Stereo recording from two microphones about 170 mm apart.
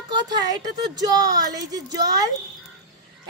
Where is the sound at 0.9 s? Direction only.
20° right (ahead or behind).